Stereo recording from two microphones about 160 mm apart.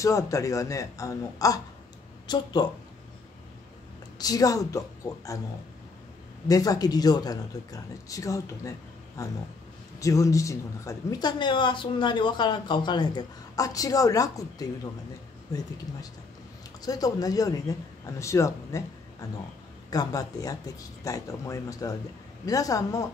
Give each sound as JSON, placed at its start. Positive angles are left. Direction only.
{"t": 0.0, "sound": "a woman's voice", "side_deg": 20}
{"t": 4.2, "sound": "a woman's voice", "side_deg": 20}
{"t": 6.4, "sound": "a woman's voice", "side_deg": 20}
{"t": 16.8, "sound": "a woman's voice", "side_deg": 25}
{"t": 19.9, "sound": "a woman's voice", "side_deg": 25}